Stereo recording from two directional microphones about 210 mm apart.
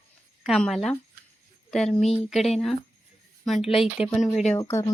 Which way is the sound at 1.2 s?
50° right (ahead or behind).